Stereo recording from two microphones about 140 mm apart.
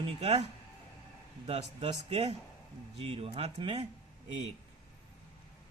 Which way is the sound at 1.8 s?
50° right (ahead or behind).